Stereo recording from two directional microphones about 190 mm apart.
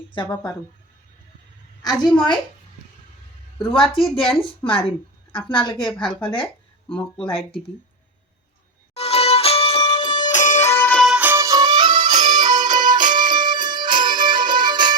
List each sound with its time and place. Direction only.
1.8 s a woman's voice: 20° left (ahead or behind)
3.6 s a woman's voice: 25° left (ahead or behind)
5.9 s speech: 5° left (ahead or behind)
9.0 s music: 30° left (ahead or behind)
10.3 s music: 40° left (ahead or behind)
10.7 s music: 10° left (ahead or behind); by 12.1 s 25° right (ahead or behind)
12.1 s music: 40° right (ahead or behind)
12.4 s music: 20° right (ahead or behind)